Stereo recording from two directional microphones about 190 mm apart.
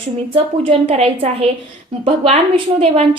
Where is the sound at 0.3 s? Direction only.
30° right (ahead or behind).